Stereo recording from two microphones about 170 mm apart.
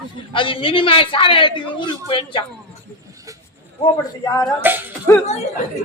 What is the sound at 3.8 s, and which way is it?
Speech, 25° left (ahead or behind).